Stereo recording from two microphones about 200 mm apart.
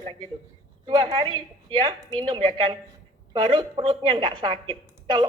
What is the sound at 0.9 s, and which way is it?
A woman's voice, 25° right (ahead or behind).